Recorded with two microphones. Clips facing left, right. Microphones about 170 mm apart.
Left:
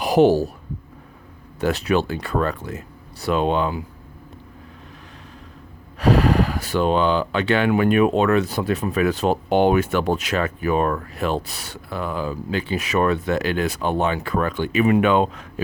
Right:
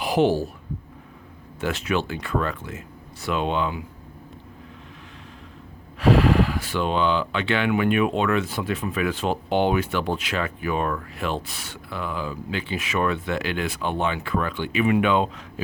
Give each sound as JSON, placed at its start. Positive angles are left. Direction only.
{"t": 0.0, "sound": "speech", "side_deg": 40}
{"t": 1.6, "sound": "speech", "side_deg": 35}
{"t": 6.0, "sound": "speech", "side_deg": 40}